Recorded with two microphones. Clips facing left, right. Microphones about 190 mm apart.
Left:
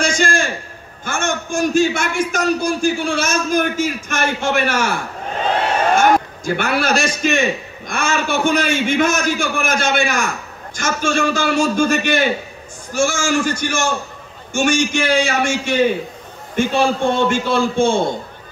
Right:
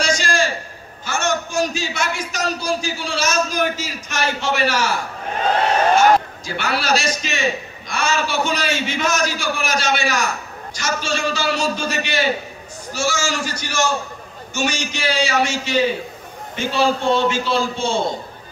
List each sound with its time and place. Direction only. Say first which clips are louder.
0.0 s a sound: left 2 dB; 50° left (ahead or behind)
1.0 s a man's voice: even; 50° left (ahead or behind)
5.9 s a man's voice: even; 50° left (ahead or behind)